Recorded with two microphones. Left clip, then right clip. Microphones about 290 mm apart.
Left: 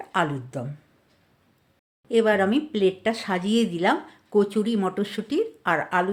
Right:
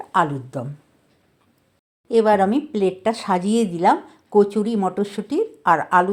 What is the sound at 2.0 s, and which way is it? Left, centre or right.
Speech, centre.